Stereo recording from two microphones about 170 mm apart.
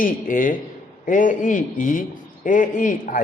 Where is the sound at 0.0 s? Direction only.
55° left (ahead or behind).